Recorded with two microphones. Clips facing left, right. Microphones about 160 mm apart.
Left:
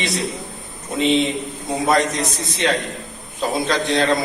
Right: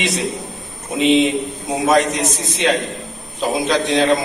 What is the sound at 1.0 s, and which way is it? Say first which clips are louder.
Speech: right 4 dB; 15° right (ahead or behind).